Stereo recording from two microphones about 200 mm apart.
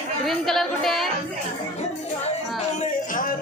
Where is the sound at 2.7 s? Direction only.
40° left (ahead or behind).